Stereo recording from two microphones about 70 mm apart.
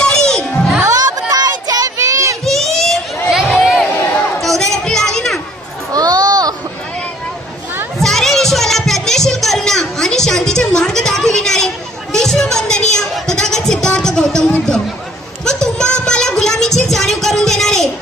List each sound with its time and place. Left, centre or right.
0.0 s music: centre
0.8 s child singing: right
2.4 s a sound: centre
5.9 s children playing: right
8.0 s music: centre
15.4 s a sound: centre